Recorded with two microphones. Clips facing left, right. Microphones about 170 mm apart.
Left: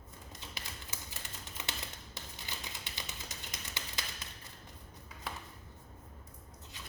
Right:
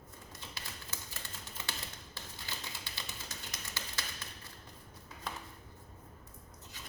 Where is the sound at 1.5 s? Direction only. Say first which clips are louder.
Left 1 dB; 20° left (ahead or behind).